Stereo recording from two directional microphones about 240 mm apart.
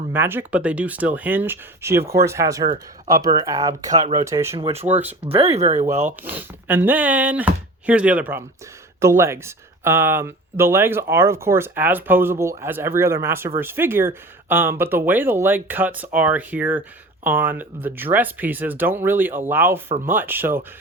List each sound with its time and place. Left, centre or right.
0.1 s speech: centre
4.9 s speech: centre
5.2 s speech: right
6.1 s speech: centre